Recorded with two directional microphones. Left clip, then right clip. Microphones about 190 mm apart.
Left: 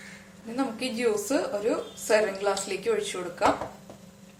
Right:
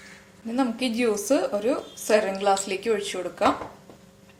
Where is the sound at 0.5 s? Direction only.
40° right (ahead or behind).